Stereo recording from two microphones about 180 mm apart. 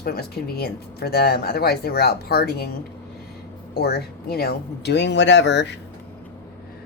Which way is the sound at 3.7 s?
60° left (ahead or behind).